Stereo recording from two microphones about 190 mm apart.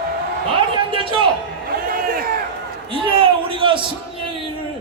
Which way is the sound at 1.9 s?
50° right (ahead or behind).